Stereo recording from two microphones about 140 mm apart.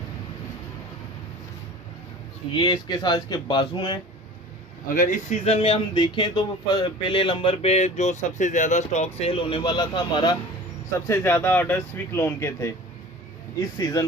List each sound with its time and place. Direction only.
2.5 s speech: 35° left (ahead or behind)
4.8 s speech: 70° left (ahead or behind); by 10.3 s 35° left (ahead or behind)
11.1 s speech: 15° left (ahead or behind)